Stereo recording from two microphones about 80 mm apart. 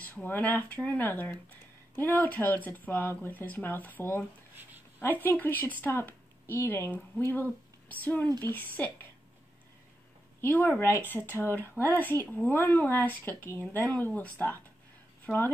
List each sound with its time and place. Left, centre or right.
0.0 s speech: left
5.0 s speech: left
10.4 s speech: left